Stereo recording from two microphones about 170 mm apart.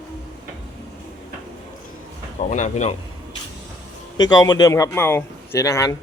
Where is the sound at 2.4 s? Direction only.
45° left (ahead or behind).